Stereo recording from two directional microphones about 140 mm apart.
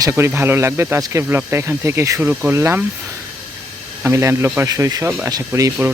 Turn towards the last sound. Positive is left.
turn(degrees=-25)  # may be behind; listen again after turning